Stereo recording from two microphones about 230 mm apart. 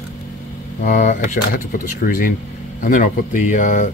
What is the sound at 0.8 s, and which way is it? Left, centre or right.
Speech, left.